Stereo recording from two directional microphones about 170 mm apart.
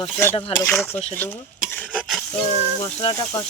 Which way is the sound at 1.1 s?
10° left (ahead or behind).